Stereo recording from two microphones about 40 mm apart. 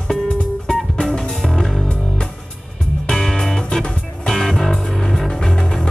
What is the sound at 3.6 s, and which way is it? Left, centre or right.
Music, left.